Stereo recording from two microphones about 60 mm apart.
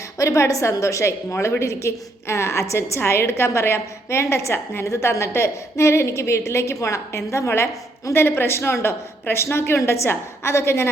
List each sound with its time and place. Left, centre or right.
0.2 s a woman's voice: left
3.0 s a woman's voice: left
6.7 s a woman's voice: left